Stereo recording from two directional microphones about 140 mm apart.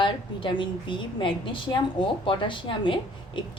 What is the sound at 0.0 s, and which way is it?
A woman's voice, 35° left (ahead or behind).